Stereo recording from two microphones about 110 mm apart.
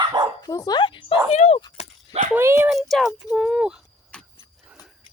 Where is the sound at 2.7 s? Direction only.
Centre (ahead or behind).